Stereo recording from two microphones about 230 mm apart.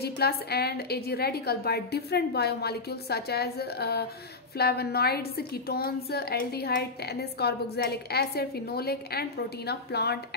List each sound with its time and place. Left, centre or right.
0.0 s a woman's voice: left